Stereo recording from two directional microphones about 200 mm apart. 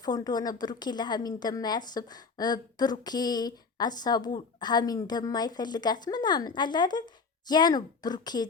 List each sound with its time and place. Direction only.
0.0 s a woman's voice: 20° left (ahead or behind)